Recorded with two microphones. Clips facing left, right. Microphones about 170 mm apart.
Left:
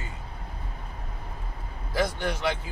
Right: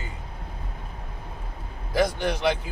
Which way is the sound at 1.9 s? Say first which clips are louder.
Right 4 dB; 15° right (ahead or behind).